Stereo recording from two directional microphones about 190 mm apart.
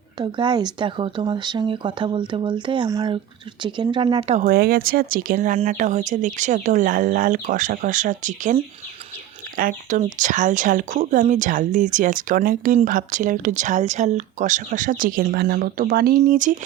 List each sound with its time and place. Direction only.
0.2 s speech: 25° right (ahead or behind)
4.4 s a woman's voice: 50° right (ahead or behind)